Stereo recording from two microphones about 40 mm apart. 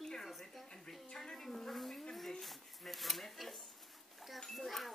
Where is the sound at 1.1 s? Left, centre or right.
Centre.